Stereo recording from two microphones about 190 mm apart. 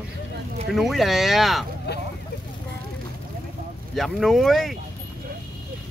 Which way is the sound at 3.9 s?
Centre (ahead or behind).